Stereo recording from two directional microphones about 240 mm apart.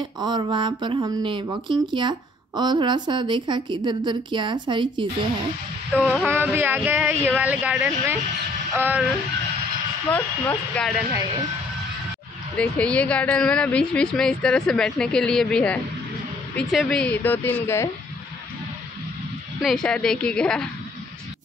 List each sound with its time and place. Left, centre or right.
0.2 s speech: centre
5.9 s speech: centre
10.0 s a woman's voice: centre
12.5 s a woman's voice: centre
19.6 s a woman's voice: centre